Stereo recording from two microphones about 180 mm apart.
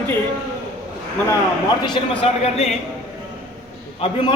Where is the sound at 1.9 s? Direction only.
30° left (ahead or behind).